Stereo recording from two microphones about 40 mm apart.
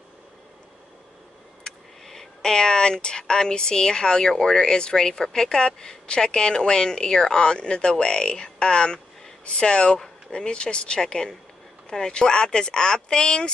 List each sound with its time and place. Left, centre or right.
2.0 s speech: centre